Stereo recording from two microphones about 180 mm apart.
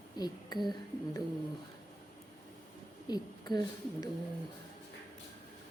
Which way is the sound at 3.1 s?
20° left (ahead or behind).